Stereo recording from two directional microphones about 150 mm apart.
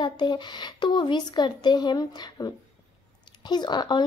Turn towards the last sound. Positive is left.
turn(degrees=30)  # may be behind; listen again after turning